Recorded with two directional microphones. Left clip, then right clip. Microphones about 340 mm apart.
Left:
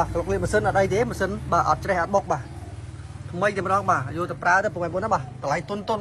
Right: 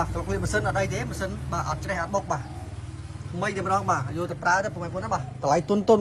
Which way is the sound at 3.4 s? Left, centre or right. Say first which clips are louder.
Left 4 dB; centre.